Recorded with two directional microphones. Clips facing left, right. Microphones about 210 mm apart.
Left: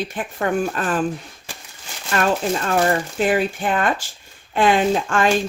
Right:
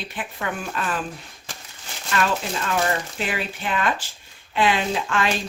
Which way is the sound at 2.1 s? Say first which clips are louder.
Left 4 dB; 45° left (ahead or behind).